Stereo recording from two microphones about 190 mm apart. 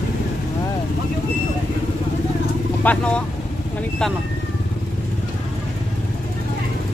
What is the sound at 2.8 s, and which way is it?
Speech, 5° left (ahead or behind).